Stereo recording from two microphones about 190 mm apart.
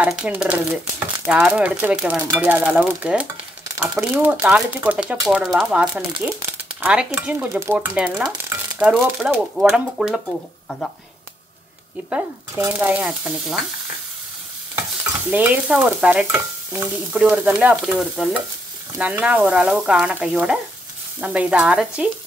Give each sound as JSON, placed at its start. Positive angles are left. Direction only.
{"t": 0.0, "sound": "stir", "side_deg": -5}
{"t": 6.8, "sound": "speech", "side_deg": -5}
{"t": 7.1, "sound": "stir", "side_deg": -10}
{"t": 12.1, "sound": "stir", "side_deg": -10}
{"t": 15.2, "sound": "stir", "side_deg": -10}